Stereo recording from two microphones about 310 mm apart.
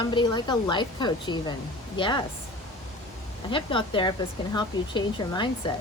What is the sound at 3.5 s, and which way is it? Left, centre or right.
A woman's voice, centre.